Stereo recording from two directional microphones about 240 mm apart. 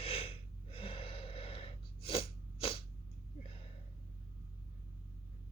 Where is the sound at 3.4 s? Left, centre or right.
Left.